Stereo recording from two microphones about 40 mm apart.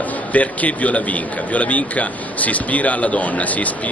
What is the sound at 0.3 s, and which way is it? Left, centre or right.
A man's voice, left.